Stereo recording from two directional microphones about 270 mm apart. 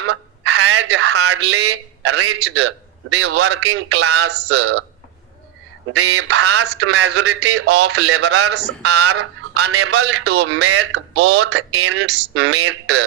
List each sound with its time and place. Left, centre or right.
0.0 s fowl: right
3.3 s a man's voice: right
5.9 s a man's voice: right